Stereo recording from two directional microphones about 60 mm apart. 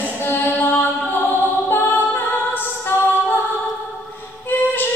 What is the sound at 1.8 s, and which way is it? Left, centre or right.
Music, left.